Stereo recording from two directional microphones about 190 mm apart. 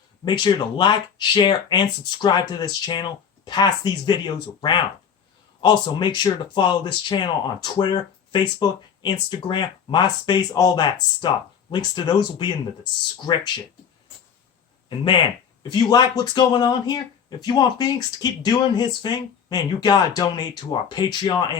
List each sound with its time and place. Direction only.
0.3 s speech: 25° left (ahead or behind)
14.8 s speech: 25° left (ahead or behind)